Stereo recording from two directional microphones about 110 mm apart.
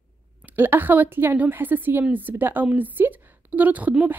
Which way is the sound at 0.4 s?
15° right (ahead or behind).